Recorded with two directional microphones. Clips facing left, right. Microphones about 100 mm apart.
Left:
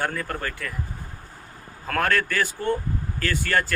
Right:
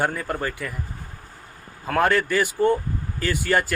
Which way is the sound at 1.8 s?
15° right (ahead or behind).